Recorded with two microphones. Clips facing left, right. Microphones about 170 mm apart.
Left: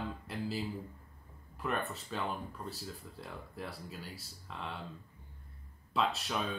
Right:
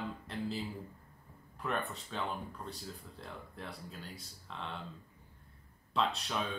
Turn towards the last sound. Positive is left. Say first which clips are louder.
# left 1 dB
turn(degrees=0)  # may be behind; listen again after turning